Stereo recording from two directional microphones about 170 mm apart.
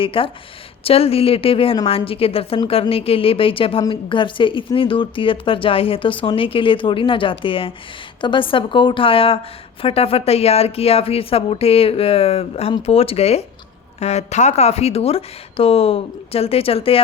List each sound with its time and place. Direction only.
0.0 s a woman's voice: 30° left (ahead or behind)